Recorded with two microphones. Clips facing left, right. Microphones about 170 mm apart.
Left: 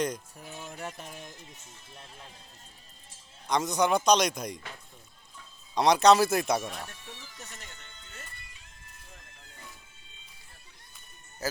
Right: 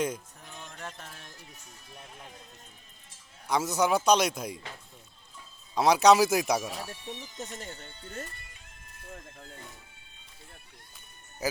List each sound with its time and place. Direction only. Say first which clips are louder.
0.4 s speech: left 5 dB; 10° left (ahead or behind); by 2.3 s 30° left (ahead or behind)
3.4 s a man's voice: even; 5° right (ahead or behind)
5.7 s speech: even; 5° right (ahead or behind); by 9.6 s 50° right (ahead or behind)